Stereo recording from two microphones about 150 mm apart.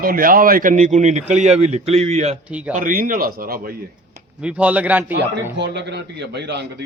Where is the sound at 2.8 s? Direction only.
65° right (ahead or behind).